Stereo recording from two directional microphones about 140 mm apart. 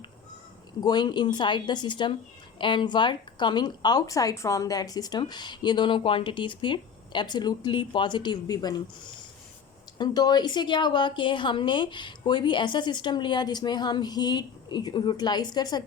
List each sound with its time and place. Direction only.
0.8 s speech: 30° left (ahead or behind)
10.0 s speech: 30° left (ahead or behind)